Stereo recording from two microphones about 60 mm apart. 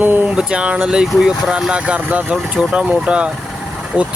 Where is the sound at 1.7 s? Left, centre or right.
Right.